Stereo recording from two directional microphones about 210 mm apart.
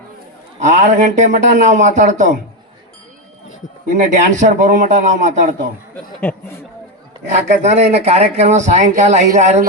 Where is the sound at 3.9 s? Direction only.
35° right (ahead or behind).